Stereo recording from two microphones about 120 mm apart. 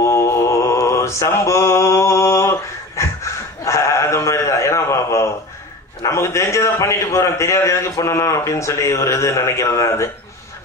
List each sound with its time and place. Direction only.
0.0 s mantra: 25° left (ahead or behind)
3.6 s bleat: 25° left (ahead or behind)
6.0 s a man's voice: 25° left (ahead or behind)